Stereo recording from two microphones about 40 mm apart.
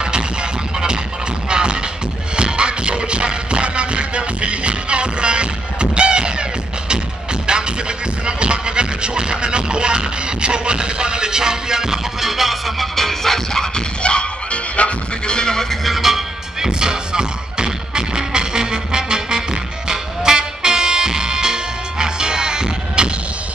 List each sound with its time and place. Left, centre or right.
0.0 s music: right
8.3 s music: right; by 13.8 s centre
14.0 s music: left
15.3 s a sound: centre
15.8 s music: centre
16.8 s music: centre